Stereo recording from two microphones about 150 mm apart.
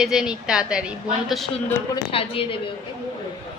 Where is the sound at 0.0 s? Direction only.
5° right (ahead or behind).